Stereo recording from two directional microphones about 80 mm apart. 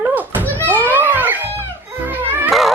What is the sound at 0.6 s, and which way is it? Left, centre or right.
Music, right.